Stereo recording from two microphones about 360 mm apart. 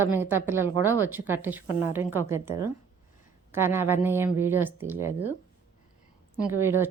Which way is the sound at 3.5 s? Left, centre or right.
Centre.